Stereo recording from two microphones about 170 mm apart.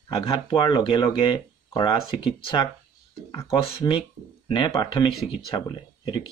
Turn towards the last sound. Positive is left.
turn(degrees=30)  # may be behind; listen again after turning